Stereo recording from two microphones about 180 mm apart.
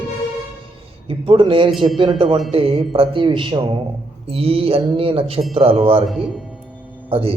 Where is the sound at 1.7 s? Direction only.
Centre (ahead or behind).